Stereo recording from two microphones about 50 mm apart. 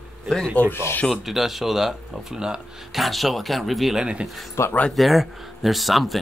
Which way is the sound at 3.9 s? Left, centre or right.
Centre.